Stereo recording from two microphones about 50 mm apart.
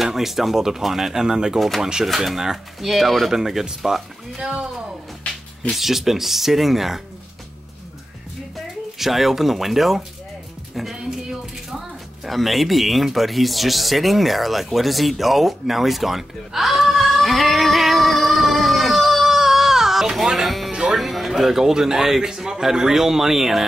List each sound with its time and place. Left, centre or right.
0.0 s speech: centre
5.7 s speech: centre
8.9 s speech: centre
10.7 s a sound: centre
20.7 s music: centre
21.0 s speech: centre